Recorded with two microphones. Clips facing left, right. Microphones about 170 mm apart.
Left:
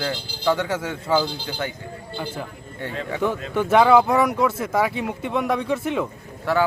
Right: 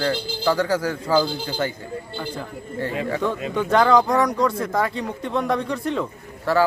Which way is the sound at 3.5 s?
5° left (ahead or behind).